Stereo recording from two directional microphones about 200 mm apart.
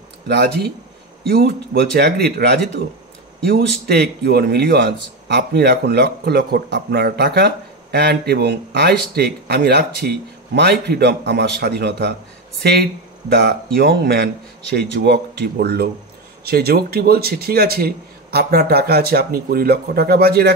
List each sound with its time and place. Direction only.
0.3 s a man's voice: 55° right (ahead or behind)
3.8 s speech: 50° right (ahead or behind)
13.3 s a man's voice: 50° right (ahead or behind)